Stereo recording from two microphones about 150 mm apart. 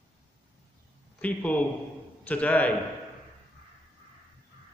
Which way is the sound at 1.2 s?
10° left (ahead or behind).